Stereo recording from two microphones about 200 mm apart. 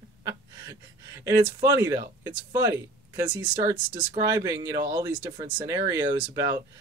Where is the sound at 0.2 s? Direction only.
15° right (ahead or behind).